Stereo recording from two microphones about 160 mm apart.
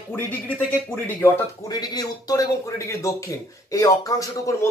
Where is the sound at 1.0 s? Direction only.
20° left (ahead or behind).